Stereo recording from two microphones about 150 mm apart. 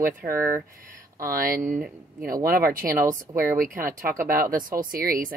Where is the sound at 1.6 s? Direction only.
Centre (ahead or behind).